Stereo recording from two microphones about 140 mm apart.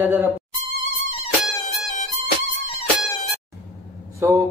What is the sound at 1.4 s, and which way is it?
Music, centre (ahead or behind).